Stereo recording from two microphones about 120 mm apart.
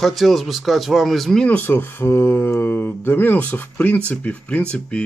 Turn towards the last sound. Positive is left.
turn(degrees=10)  # may be behind; listen again after turning